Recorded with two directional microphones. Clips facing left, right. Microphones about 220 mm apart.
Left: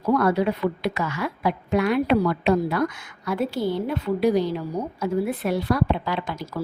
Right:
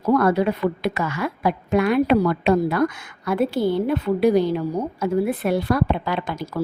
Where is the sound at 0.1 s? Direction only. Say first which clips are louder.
Right 2 dB; 50° right (ahead or behind).